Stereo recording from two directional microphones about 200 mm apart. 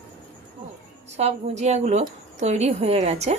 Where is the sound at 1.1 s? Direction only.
30° right (ahead or behind).